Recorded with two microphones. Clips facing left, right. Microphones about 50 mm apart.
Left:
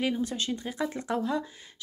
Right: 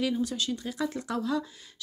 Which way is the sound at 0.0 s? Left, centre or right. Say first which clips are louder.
Even; left.